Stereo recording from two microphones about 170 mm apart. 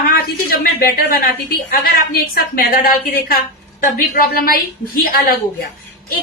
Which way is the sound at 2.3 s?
60° left (ahead or behind).